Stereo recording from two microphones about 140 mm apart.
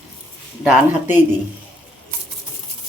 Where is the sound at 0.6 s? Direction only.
10° right (ahead or behind).